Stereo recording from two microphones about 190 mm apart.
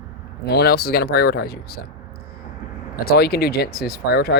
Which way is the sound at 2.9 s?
55° left (ahead or behind).